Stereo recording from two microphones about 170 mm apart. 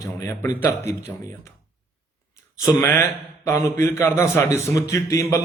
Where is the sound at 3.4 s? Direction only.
15° left (ahead or behind).